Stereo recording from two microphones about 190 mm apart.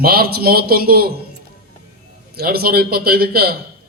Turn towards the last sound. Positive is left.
turn(degrees=-50)  # may be behind; listen again after turning